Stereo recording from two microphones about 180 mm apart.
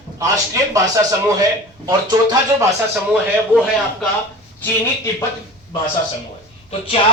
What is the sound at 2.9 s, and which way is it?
Speech, 5° right (ahead or behind).